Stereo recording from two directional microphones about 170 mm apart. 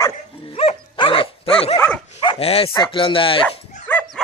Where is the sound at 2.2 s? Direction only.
35° left (ahead or behind).